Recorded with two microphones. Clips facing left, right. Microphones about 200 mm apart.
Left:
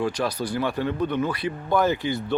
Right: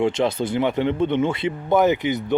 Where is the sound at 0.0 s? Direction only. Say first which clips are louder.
Right 5 dB; 25° right (ahead or behind).